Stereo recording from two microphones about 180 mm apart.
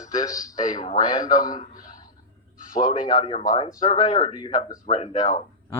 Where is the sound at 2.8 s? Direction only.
25° left (ahead or behind).